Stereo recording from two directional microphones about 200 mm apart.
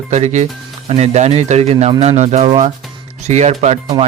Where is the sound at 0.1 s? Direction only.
35° right (ahead or behind).